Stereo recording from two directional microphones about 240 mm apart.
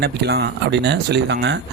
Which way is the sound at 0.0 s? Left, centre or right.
Right.